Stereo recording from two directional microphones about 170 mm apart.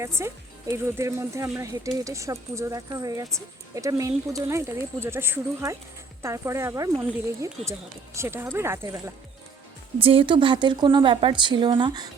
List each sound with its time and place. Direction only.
0.0 s speech: 15° right (ahead or behind)
10.0 s a woman's voice: 35° right (ahead or behind)